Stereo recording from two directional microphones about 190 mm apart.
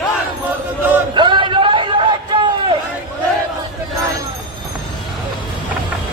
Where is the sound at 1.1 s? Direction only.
25° right (ahead or behind).